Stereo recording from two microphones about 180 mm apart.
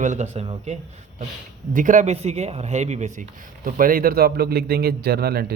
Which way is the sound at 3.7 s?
50° right (ahead or behind).